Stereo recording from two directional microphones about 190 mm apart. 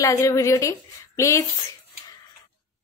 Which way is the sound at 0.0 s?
15° left (ahead or behind).